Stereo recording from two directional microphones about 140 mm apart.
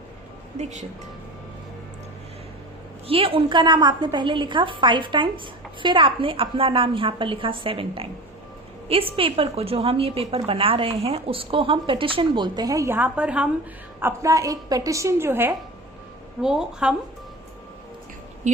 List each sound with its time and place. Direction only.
0.6 s speech: 55° right (ahead or behind)
3.1 s a woman's voice: 40° right (ahead or behind); by 13.5 s 10° right (ahead or behind)
14.0 s a woman's voice: 20° right (ahead or behind)
16.4 s a woman's voice: 5° right (ahead or behind)
18.4 s speech: 60° right (ahead or behind)